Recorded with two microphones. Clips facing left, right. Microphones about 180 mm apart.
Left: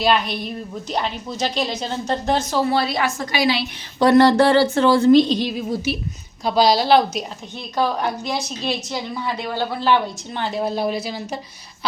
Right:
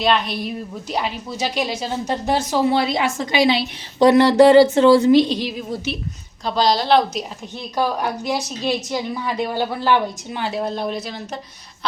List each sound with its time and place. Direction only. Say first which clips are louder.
0.0 s a woman's voice: even; centre (ahead or behind)
6.4 s a woman's voice: left 2 dB; 10° left (ahead or behind)
7.8 s a woman's voice: even; 10° right (ahead or behind)
10.6 s a woman's voice: left 4 dB; 5° left (ahead or behind)